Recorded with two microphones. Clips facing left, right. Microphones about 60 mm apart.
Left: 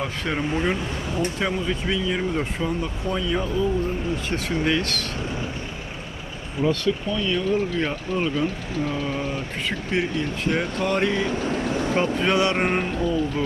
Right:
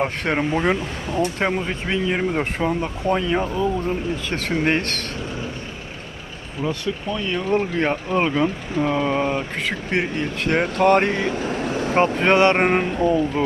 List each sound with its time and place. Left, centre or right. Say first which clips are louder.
0.0 s speech: right 5 dB; right
1.4 s speech: right 2 dB; right
3.6 s speech: right 2 dB; right
6.7 s speech: left 2 dB; right
7.5 s speech: right 3 dB; right
8.1 s speech: right 3 dB; right